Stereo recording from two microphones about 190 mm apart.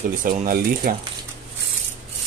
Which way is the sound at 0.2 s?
45° right (ahead or behind).